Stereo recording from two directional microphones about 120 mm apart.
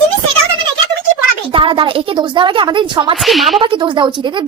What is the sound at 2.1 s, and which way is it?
A woman's voice, 40° right (ahead or behind).